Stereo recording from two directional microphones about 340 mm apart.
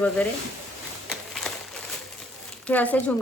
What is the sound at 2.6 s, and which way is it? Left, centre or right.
Speech, centre.